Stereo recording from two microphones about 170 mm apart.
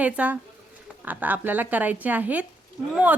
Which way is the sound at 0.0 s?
10° right (ahead or behind).